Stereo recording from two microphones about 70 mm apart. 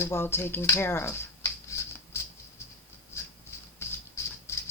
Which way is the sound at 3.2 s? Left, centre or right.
Left.